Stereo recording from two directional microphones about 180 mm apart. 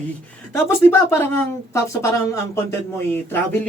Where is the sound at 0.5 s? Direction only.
15° left (ahead or behind).